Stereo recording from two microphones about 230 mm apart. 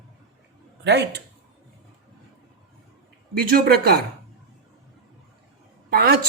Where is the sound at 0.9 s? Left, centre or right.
Right.